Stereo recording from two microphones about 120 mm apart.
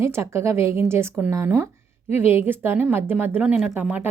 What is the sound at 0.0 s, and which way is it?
A woman's voice, 20° right (ahead or behind).